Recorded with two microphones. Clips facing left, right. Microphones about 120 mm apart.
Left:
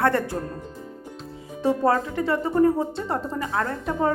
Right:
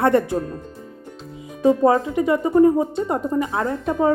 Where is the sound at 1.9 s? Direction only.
15° right (ahead or behind).